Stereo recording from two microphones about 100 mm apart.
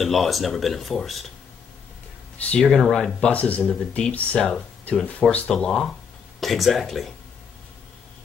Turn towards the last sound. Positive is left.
turn(degrees=0)  # may be behind; listen again after turning